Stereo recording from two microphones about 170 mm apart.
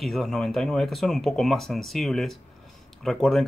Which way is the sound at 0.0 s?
Centre (ahead or behind).